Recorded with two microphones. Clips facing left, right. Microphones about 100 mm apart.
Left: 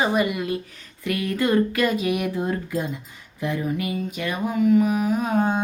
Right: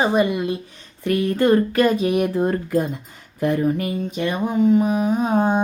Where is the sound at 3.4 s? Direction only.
50° right (ahead or behind).